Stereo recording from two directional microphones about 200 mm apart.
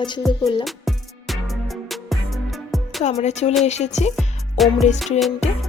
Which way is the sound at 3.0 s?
35° left (ahead or behind).